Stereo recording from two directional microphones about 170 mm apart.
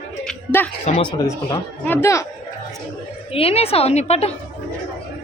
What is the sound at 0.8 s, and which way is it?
Speech, 30° left (ahead or behind).